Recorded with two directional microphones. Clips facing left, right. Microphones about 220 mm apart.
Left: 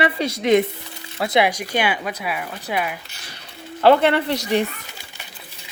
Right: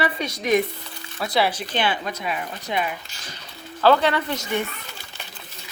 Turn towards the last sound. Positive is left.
turn(degrees=35)  # may be behind; listen again after turning